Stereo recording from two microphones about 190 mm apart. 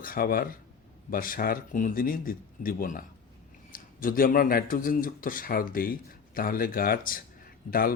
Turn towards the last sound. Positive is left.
turn(degrees=50)  # may be behind; listen again after turning